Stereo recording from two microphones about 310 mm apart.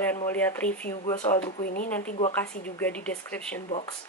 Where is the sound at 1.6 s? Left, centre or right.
Left.